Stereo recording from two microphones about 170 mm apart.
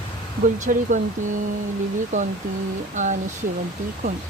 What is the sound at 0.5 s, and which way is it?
Speech, 50° right (ahead or behind).